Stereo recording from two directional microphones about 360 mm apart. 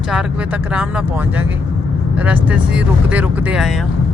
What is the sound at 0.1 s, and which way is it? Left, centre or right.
Speech, centre.